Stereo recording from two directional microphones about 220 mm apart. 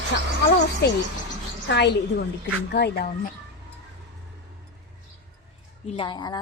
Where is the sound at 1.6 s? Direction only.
50° left (ahead or behind).